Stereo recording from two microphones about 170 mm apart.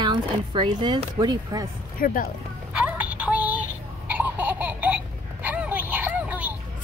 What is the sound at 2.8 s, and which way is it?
Music, 10° right (ahead or behind).